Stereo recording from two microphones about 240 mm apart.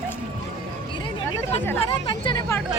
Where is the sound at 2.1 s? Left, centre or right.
Centre.